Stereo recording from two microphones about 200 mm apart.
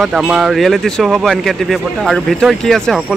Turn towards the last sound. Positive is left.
turn(degrees=0)  # may be behind; listen again after turning